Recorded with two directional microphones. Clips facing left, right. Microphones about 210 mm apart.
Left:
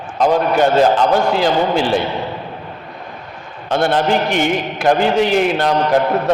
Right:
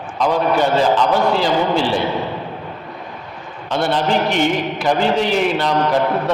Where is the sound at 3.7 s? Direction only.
50° left (ahead or behind).